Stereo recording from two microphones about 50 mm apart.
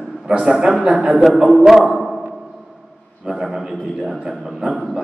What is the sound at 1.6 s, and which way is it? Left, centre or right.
Speech, centre.